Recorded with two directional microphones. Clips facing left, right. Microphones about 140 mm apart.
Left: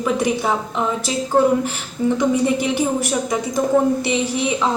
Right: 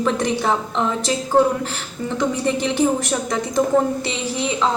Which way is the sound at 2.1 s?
10° left (ahead or behind).